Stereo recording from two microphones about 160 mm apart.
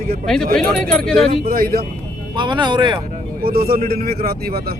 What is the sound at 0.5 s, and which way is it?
Speech, 5° left (ahead or behind).